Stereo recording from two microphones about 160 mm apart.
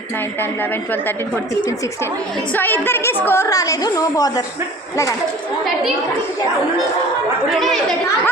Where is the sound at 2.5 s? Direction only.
10° left (ahead or behind).